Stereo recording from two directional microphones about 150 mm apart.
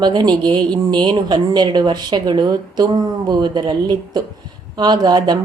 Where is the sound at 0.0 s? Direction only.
30° right (ahead or behind).